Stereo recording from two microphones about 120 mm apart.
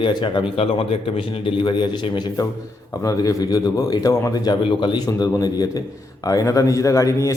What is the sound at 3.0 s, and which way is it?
A man's voice, 30° left (ahead or behind).